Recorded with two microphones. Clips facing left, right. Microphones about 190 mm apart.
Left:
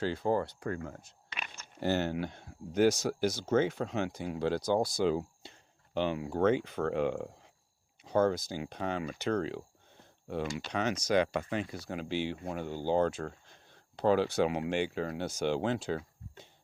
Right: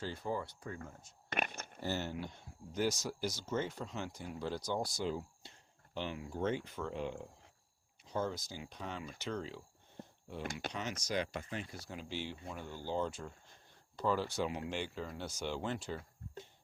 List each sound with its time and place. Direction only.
0.0 s speech: 70° left (ahead or behind)
1.3 s a sound: 55° right (ahead or behind)
1.8 s speech: 70° left (ahead or behind)
10.4 s speech: 55° right (ahead or behind)
10.7 s speech: 70° left (ahead or behind)